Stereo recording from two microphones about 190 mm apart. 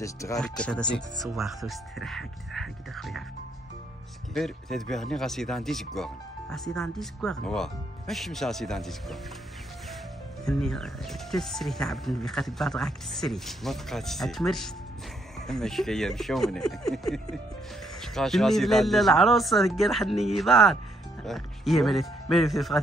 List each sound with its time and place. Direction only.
0.0 s speech: 15° left (ahead or behind)
0.4 s speech: 5° left (ahead or behind)
4.3 s speech: centre (ahead or behind)
10.4 s speech: 5° left (ahead or behind)